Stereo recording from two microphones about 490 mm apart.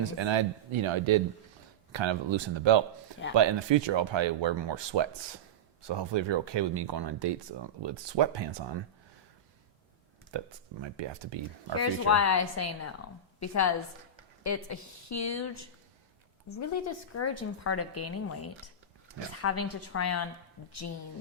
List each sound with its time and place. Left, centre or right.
0.0 s speech: right
10.3 s speech: right
11.8 s a woman's voice: left